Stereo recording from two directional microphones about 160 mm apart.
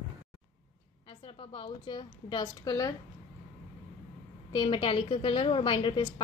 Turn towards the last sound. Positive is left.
turn(degrees=30)  # may be behind; listen again after turning